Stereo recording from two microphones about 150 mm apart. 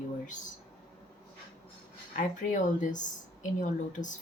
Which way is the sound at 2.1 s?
55° left (ahead or behind).